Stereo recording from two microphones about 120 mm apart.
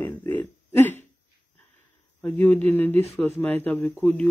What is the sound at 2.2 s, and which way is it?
Speech, 15° left (ahead or behind).